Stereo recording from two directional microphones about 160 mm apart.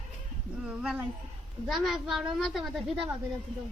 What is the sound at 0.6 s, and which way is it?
A woman's voice, 5° right (ahead or behind).